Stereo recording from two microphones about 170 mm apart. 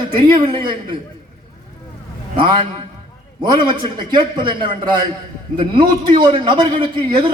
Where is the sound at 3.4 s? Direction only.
25° right (ahead or behind).